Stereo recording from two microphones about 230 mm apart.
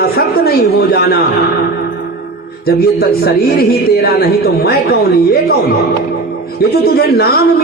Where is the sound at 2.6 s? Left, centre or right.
Left.